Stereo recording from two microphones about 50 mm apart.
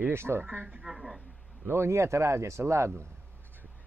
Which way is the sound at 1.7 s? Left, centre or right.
Right.